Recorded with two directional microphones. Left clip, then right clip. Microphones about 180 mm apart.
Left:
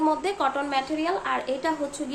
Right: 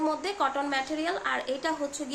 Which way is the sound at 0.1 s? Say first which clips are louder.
Left 4 dB; 5° right (ahead or behind).